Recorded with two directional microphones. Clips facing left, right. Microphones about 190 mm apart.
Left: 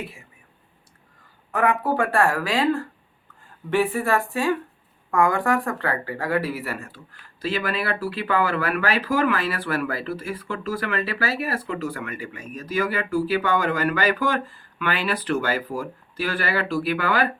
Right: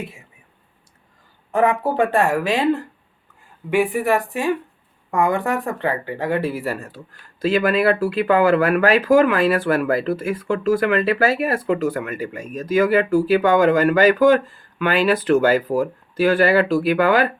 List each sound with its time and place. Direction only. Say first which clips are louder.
1.5 s speech: right 4 dB; 25° right (ahead or behind)
7.5 s speech: right 9 dB; 45° right (ahead or behind)